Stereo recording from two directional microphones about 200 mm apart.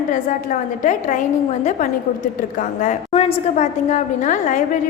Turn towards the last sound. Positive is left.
turn(degrees=40)  # may be behind; listen again after turning